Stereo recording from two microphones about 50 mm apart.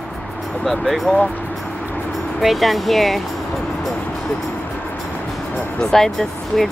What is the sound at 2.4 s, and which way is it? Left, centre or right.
Speech, centre.